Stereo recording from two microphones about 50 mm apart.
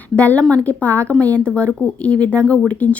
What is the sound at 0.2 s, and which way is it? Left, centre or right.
Speech, left.